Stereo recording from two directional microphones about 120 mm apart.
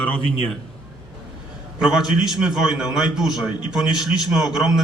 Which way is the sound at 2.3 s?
5° right (ahead or behind).